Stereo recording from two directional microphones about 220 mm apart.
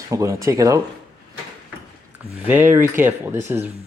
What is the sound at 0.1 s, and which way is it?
Speech, 15° right (ahead or behind).